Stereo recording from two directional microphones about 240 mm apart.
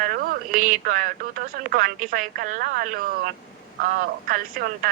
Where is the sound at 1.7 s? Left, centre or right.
Right.